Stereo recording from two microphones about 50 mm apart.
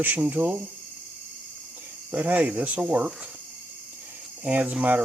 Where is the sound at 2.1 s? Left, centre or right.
Right.